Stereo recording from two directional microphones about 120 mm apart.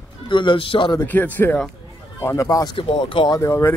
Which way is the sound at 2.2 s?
25° left (ahead or behind).